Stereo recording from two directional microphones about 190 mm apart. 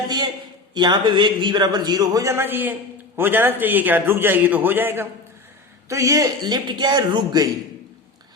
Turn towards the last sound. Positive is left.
turn(degrees=-20)  # may be behind; listen again after turning